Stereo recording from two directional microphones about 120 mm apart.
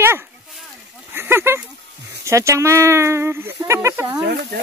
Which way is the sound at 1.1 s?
20° right (ahead or behind).